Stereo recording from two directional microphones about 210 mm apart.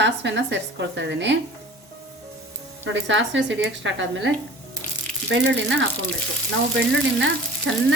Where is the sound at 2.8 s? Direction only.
60° right (ahead or behind).